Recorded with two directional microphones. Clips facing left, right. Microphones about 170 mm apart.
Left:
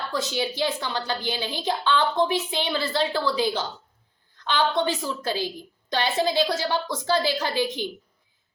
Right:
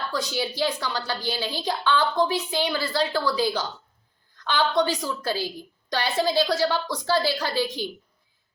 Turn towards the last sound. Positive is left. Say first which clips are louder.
# left 1 dB
turn(degrees=20)  # may be behind; listen again after turning